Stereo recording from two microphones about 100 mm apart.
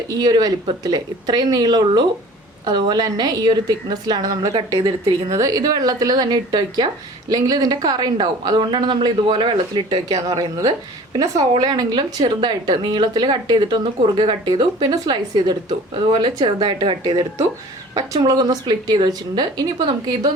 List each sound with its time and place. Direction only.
0.1 s a woman's voice: 40° right (ahead or behind)
16.0 s speech: 55° right (ahead or behind)
18.2 s a woman's voice: 40° right (ahead or behind)